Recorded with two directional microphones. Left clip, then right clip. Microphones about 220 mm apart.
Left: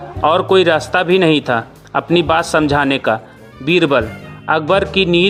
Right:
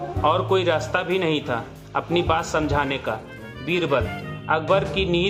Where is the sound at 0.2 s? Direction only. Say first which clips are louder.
Left 9 dB; 45° left (ahead or behind).